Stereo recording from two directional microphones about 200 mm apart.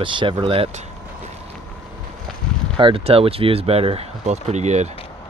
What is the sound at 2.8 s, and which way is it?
Speech, 30° right (ahead or behind).